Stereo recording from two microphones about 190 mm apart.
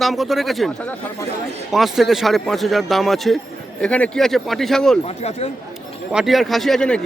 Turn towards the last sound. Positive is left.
turn(degrees=5)  # may be behind; listen again after turning